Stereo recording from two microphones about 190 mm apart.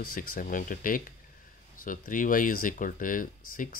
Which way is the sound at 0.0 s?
50° left (ahead or behind).